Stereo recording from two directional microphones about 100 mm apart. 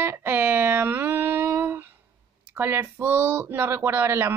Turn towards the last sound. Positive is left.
turn(degrees=-25)  # may be behind; listen again after turning